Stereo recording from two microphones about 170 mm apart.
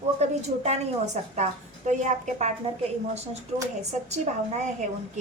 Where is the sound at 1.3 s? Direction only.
45° right (ahead or behind).